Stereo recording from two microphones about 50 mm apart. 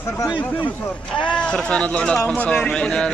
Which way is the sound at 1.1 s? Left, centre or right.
Left.